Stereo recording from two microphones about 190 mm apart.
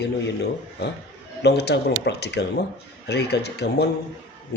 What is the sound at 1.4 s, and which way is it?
A man's voice, 60° left (ahead or behind).